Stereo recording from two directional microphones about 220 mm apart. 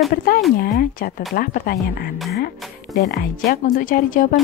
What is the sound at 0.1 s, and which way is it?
A woman's voice, 40° left (ahead or behind).